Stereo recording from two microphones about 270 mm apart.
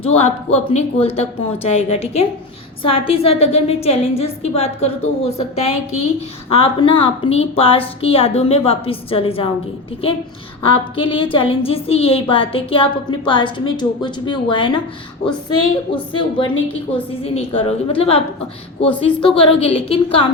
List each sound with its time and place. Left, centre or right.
0.0 s a woman's voice: left
10.7 s a woman's voice: centre
16.1 s a woman's voice: centre